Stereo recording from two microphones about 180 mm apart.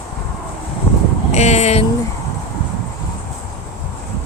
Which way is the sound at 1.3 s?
40° left (ahead or behind).